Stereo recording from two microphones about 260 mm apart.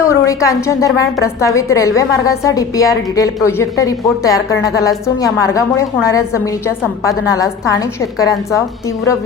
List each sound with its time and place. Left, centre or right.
0.0 s a woman's voice: centre